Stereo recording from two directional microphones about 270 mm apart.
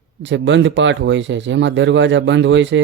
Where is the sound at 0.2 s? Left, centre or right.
Right.